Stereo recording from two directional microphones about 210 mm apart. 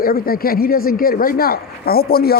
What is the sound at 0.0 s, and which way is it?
A man's voice, 45° left (ahead or behind).